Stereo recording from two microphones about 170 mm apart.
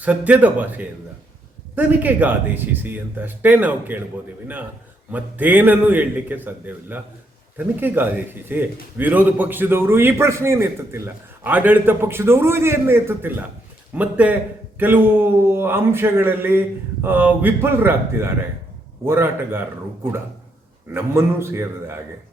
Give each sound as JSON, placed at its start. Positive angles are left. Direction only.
{"t": 0.0, "sound": "a man's voice", "side_deg": -10}
{"t": 5.1, "sound": "a man's voice", "side_deg": -10}
{"t": 20.9, "sound": "a man's voice", "side_deg": -15}